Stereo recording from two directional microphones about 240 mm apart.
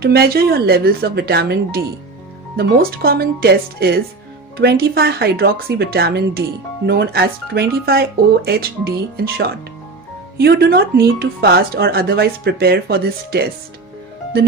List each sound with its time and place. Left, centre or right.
0.0 s speech: right